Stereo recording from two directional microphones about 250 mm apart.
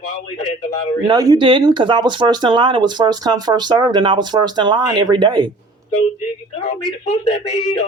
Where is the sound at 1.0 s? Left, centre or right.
Centre.